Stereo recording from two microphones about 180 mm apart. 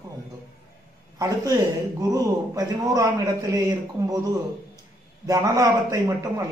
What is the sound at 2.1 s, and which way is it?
A man's voice, 20° right (ahead or behind).